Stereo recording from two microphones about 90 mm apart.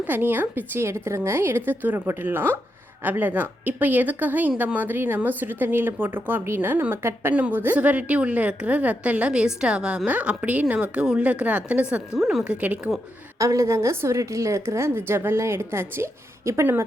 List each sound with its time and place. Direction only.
0.0 s a woman's voice: 20° right (ahead or behind); by 12.5 s 5° right (ahead or behind)
12.5 s a woman's voice: 15° right (ahead or behind)
13.4 s a woman's voice: 35° right (ahead or behind)